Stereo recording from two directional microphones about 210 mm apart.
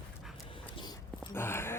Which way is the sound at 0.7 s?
20° left (ahead or behind).